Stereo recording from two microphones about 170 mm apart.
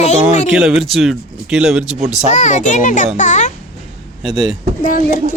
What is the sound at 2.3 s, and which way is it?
A child's voice, 45° left (ahead or behind).